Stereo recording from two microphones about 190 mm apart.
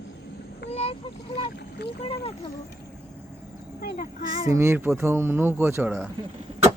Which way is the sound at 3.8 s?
50° left (ahead or behind).